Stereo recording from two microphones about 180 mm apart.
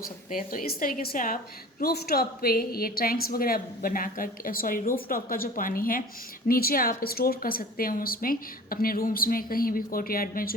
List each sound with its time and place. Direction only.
0.3 s a woman's voice: 50° left (ahead or behind)